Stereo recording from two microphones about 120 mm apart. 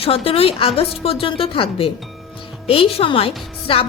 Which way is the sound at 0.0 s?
55° left (ahead or behind).